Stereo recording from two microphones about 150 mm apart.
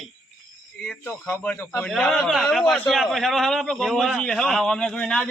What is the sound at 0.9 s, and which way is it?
A man's voice, 10° left (ahead or behind).